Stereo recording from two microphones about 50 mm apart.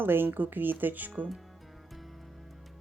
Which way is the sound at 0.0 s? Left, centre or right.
Right.